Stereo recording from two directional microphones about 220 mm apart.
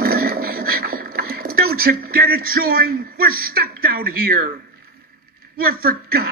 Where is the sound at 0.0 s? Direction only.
45° right (ahead or behind).